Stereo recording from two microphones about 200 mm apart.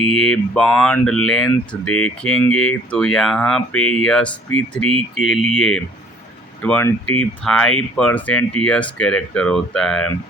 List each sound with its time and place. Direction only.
0.1 s speech: centre (ahead or behind)
1.9 s speech: 90° left
2.6 s speech: 5° left (ahead or behind)
3.8 s speech: 90° left
4.0 s speech: 5° left (ahead or behind)